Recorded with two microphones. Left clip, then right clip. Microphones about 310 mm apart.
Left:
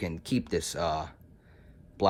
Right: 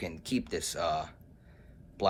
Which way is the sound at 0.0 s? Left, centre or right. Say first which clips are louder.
Left 2 dB; left.